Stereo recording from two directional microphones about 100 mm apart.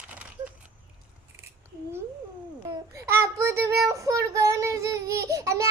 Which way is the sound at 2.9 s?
30° right (ahead or behind).